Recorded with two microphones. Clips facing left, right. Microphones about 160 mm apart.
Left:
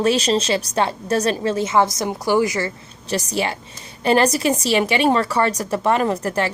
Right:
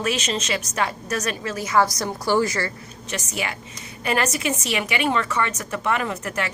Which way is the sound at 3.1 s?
35° left (ahead or behind).